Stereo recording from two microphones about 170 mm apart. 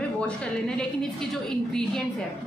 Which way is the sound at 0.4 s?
5° left (ahead or behind).